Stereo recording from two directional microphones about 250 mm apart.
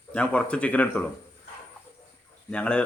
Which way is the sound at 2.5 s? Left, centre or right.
Centre.